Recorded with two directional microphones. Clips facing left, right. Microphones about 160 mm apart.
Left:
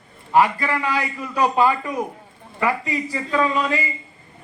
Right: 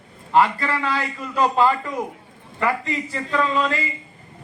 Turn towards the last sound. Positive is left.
turn(degrees=15)  # may be behind; listen again after turning